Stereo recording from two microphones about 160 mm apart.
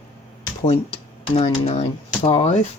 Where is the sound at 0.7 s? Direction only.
40° left (ahead or behind).